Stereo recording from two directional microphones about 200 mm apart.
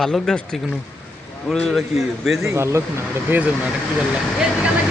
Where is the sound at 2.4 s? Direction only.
15° right (ahead or behind).